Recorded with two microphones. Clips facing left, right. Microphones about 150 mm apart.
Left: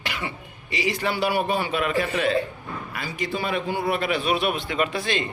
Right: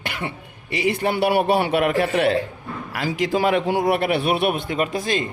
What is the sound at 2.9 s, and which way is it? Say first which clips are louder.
A man's voice: right 8 dB; 90° right.